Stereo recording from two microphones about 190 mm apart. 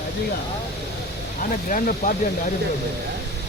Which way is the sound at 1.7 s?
45° left (ahead or behind).